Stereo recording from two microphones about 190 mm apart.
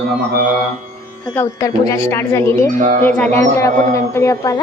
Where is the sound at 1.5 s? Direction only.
15° left (ahead or behind).